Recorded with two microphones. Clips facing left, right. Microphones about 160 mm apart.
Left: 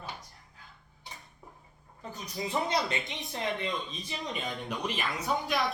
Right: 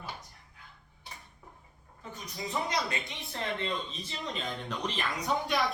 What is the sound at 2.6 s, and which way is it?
Speech, 20° left (ahead or behind).